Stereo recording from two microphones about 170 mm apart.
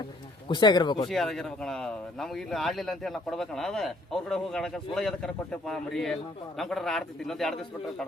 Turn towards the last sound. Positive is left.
turn(degrees=0)  # may be behind; listen again after turning